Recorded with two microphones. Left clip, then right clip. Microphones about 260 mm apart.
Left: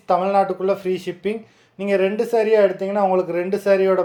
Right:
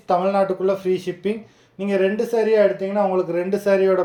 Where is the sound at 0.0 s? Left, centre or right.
Centre.